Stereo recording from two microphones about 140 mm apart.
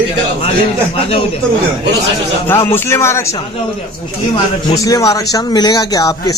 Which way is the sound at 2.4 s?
15° left (ahead or behind).